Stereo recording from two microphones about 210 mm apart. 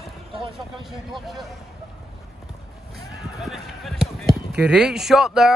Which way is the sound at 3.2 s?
Centre (ahead or behind).